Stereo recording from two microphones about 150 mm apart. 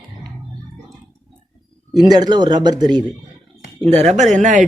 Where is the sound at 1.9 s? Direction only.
30° right (ahead or behind).